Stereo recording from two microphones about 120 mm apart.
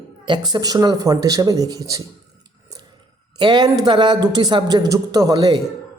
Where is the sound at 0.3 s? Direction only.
35° right (ahead or behind).